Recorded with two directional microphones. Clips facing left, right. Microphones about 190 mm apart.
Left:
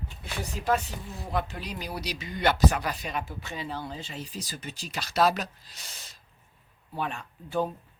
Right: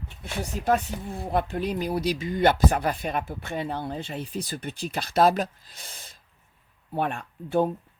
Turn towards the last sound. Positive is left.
turn(degrees=-55)  # may be behind; listen again after turning